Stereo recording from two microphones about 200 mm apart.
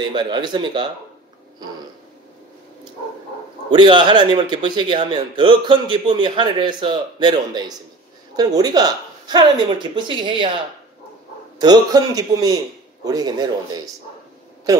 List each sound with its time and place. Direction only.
0.1 s a man's voice: 20° right (ahead or behind)
3.7 s a man's voice: 25° right (ahead or behind)
11.5 s a man's voice: 20° right (ahead or behind)